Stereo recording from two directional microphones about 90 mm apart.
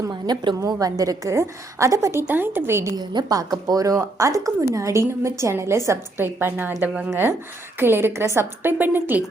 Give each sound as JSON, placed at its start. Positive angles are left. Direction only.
{"t": 0.1, "sound": "a woman's voice", "side_deg": -55}
{"t": 0.6, "sound": "a woman's voice", "side_deg": -45}
{"t": 2.2, "sound": "a woman's voice", "side_deg": -20}
{"t": 2.9, "sound": "a woman's voice", "side_deg": -55}